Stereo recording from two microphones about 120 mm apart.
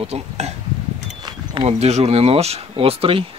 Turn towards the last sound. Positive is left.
turn(degrees=-50)  # may be behind; listen again after turning